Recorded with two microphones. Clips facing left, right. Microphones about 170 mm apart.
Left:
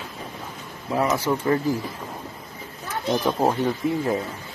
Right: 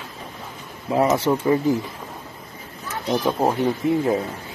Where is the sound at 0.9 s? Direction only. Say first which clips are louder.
Right 4 dB; 25° right (ahead or behind).